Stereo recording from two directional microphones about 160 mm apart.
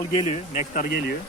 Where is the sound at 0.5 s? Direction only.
50° left (ahead or behind).